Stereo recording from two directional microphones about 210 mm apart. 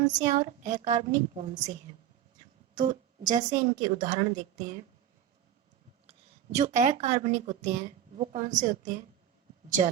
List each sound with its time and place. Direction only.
0.0 s a woman's voice: 35° right (ahead or behind)
2.7 s a woman's voice: 40° right (ahead or behind)
6.6 s a woman's voice: 35° right (ahead or behind)